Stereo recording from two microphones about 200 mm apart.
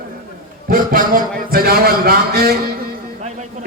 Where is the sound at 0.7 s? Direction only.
45° right (ahead or behind).